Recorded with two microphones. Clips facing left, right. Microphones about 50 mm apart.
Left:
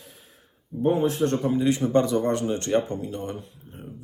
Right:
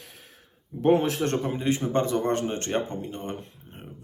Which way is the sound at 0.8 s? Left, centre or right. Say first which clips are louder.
Even; right.